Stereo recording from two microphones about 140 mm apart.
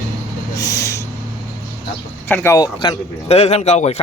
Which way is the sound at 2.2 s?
15° left (ahead or behind).